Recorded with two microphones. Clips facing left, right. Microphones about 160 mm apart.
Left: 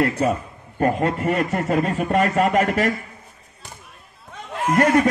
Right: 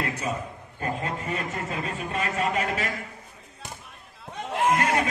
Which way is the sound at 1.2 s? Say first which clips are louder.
Left 10 dB; 70° left (ahead or behind).